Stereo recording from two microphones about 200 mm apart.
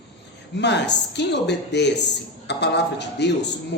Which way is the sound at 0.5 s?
60° left (ahead or behind).